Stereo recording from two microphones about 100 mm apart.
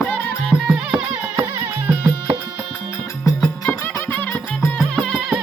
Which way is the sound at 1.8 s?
35° right (ahead or behind).